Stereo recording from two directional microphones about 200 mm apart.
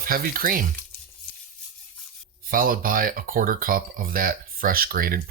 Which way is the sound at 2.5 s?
45° right (ahead or behind).